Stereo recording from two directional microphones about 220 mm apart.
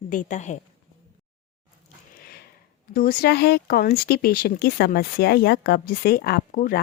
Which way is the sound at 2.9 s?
40° left (ahead or behind).